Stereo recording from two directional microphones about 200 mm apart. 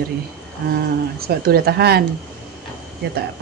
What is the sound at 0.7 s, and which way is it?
A woman's voice, 50° right (ahead or behind).